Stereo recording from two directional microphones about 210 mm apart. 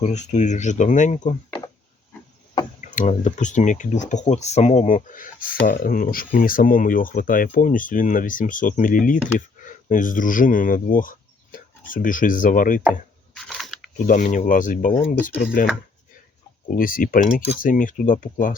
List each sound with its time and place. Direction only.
0.0 s speech: 35° left (ahead or behind)
2.8 s speech: 35° left (ahead or behind)
12.9 s a sound: centre (ahead or behind)
14.1 s speech: 35° left (ahead or behind)
16.6 s speech: 40° left (ahead or behind)